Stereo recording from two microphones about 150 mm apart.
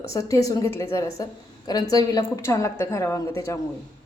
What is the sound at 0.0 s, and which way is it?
A woman's voice, 20° left (ahead or behind).